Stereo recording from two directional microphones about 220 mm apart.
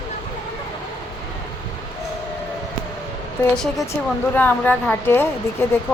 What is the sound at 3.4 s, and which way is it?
A woman's voice, 10° left (ahead or behind).